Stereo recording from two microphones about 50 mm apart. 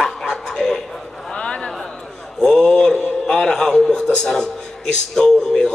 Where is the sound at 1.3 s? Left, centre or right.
Centre.